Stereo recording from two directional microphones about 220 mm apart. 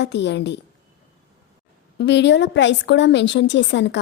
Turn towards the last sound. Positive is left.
turn(degrees=55)  # may be behind; listen again after turning